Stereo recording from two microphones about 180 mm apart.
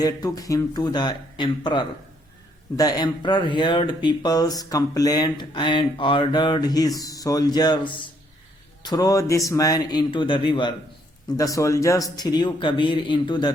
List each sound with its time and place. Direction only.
0.0 s speech: 20° left (ahead or behind)